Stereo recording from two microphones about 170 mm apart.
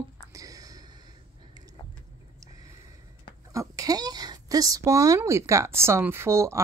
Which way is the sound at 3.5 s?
20° right (ahead or behind).